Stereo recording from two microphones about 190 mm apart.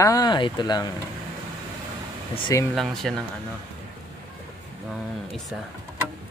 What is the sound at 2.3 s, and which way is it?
Speech, 25° left (ahead or behind).